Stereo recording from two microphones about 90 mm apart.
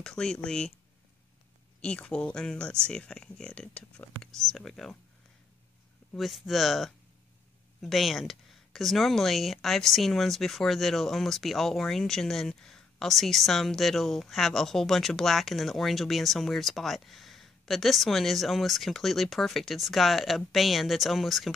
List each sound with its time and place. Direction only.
0.0 s speech: 5° left (ahead or behind)
1.8 s speech: 10° left (ahead or behind)
6.1 s speech: centre (ahead or behind)